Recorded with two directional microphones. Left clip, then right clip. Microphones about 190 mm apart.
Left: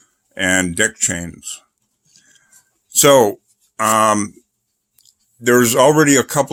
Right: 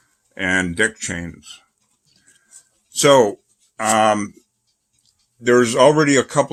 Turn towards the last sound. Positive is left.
turn(degrees=65)  # may be behind; listen again after turning